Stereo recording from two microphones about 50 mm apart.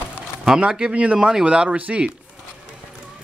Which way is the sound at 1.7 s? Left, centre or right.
Right.